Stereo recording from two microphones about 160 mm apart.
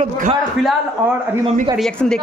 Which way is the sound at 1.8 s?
5° left (ahead or behind).